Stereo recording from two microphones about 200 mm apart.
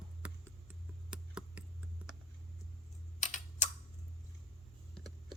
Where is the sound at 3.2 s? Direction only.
40° left (ahead or behind).